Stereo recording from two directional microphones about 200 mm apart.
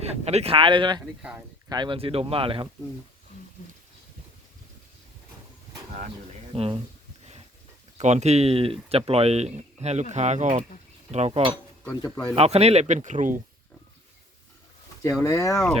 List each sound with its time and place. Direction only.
0.0 s speech: 30° right (ahead or behind)
6.5 s speech: 30° right (ahead or behind)
7.9 s speech: 35° right (ahead or behind)
11.9 s speech: 15° left (ahead or behind)
12.4 s speech: 30° right (ahead or behind)
15.2 s speech: 15° left (ahead or behind)